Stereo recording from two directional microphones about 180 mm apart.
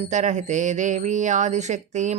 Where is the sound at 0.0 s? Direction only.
40° right (ahead or behind).